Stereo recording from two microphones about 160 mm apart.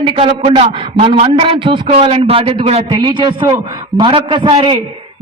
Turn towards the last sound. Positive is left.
turn(degrees=-30)  # may be behind; listen again after turning